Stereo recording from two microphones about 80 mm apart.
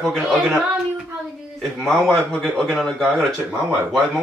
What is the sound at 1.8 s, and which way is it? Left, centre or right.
Speech, right.